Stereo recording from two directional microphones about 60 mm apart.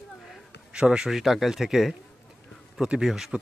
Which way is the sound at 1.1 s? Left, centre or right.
Centre.